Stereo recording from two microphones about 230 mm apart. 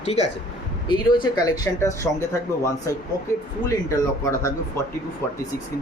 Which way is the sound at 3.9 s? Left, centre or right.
Centre.